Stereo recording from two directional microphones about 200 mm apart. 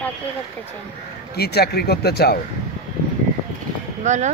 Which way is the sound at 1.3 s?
55° left (ahead or behind).